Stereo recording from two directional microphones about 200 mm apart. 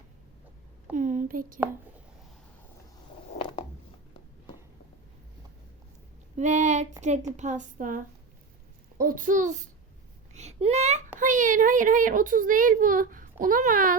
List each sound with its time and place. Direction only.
0.9 s speech: 40° right (ahead or behind)
6.3 s a woman's voice: 35° right (ahead or behind)